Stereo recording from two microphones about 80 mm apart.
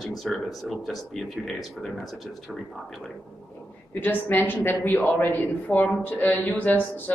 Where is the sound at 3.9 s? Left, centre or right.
Left.